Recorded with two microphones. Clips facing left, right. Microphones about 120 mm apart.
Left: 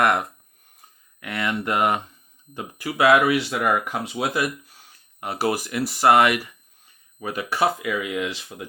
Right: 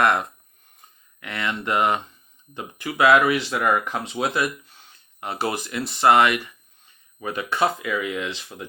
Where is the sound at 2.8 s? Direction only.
25° left (ahead or behind).